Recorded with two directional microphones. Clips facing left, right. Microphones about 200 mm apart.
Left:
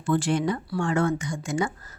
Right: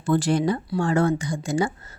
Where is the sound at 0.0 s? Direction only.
40° right (ahead or behind).